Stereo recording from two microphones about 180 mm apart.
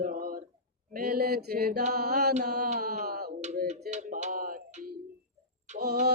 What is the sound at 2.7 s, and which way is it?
Speech, 50° right (ahead or behind).